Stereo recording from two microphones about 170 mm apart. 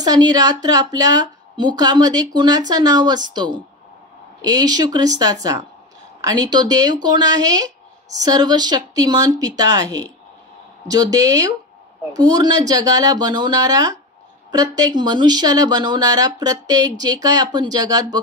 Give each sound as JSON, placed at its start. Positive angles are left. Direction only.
{"t": 0.0, "sound": "speech", "side_deg": -25}